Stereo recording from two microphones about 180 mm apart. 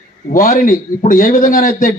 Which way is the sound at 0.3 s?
50° left (ahead or behind).